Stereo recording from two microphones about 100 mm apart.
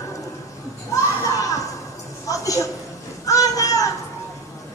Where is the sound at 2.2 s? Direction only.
35° left (ahead or behind).